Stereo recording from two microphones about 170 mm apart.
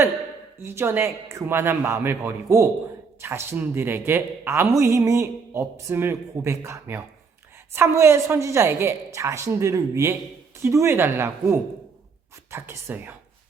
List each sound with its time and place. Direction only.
0.6 s speech: 15° right (ahead or behind)